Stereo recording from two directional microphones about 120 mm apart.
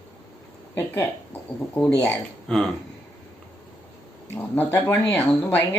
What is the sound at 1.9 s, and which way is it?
Speech, 20° left (ahead or behind).